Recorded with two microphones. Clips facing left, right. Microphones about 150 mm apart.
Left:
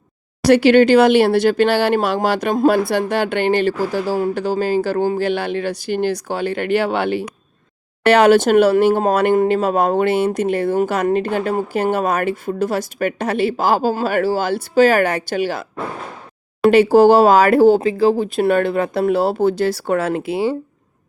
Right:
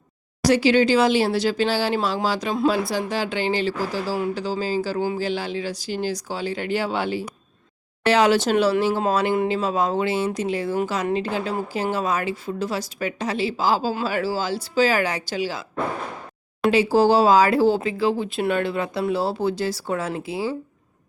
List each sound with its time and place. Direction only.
0.4 s speech: 60° left (ahead or behind)
16.6 s speech: 60° left (ahead or behind)
17.7 s speech: 40° left (ahead or behind); by 20.6 s 65° left (ahead or behind)